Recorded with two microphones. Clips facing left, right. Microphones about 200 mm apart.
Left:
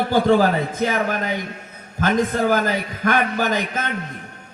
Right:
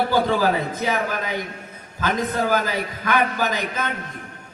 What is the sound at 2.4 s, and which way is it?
A man's voice, 50° left (ahead or behind).